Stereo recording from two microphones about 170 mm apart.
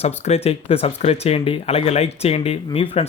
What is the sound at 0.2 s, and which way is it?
Speech, 35° left (ahead or behind).